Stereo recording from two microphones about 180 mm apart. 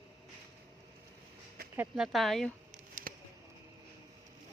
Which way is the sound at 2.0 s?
Centre (ahead or behind).